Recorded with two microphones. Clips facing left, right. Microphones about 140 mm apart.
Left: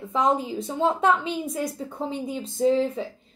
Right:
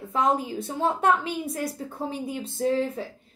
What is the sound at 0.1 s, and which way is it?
A woman's voice, 5° right (ahead or behind).